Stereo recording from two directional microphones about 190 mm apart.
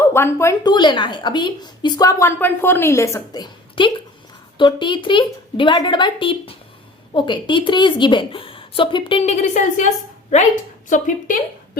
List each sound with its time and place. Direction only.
0.0 s a woman's voice: 15° left (ahead or behind); by 9.8 s 40° left (ahead or behind)
10.8 s a woman's voice: 45° left (ahead or behind)